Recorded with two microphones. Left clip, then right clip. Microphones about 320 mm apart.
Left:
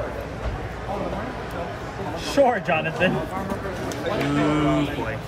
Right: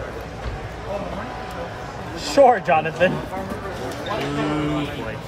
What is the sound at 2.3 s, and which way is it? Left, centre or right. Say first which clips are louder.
Speech: right 5 dB; right.